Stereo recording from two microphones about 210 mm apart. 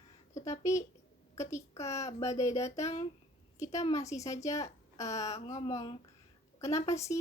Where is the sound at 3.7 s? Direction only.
15° left (ahead or behind).